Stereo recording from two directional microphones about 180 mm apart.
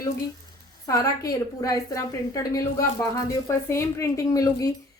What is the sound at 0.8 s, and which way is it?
A woman's voice, 20° left (ahead or behind).